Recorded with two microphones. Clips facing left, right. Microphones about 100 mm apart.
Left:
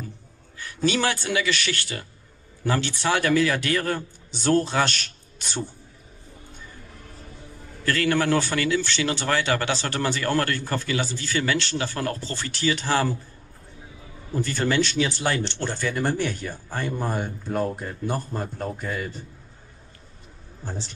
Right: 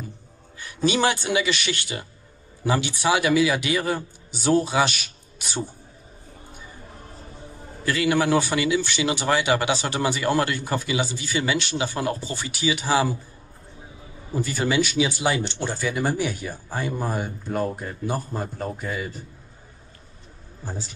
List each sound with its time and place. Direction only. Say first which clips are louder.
0.6 s speech: right 2 dB; 20° right (ahead or behind)
6.9 s music: right 3 dB; 30° right (ahead or behind)
7.8 s speech: right 1 dB; 10° right (ahead or behind)
14.3 s speech: even; 10° right (ahead or behind)
20.6 s a man's voice: even; 5° right (ahead or behind)